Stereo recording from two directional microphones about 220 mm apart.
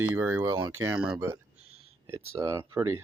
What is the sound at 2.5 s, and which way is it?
Speech, 15° right (ahead or behind).